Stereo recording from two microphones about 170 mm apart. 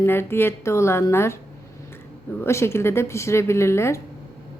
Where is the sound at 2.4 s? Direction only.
15° left (ahead or behind).